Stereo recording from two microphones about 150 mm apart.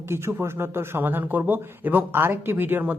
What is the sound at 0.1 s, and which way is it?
Speech, 15° right (ahead or behind).